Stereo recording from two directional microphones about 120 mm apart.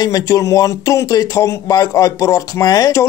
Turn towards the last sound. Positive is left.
turn(degrees=30)  # may be behind; listen again after turning